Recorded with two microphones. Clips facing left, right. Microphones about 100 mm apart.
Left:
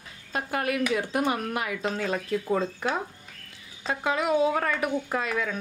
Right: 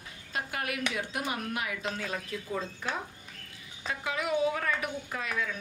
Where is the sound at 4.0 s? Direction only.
70° left (ahead or behind).